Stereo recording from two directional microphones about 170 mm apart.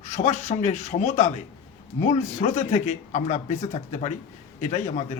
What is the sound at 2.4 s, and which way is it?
Speech, 40° left (ahead or behind).